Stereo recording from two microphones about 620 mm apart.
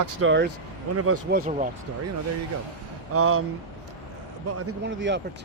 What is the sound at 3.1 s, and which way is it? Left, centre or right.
Speech, right.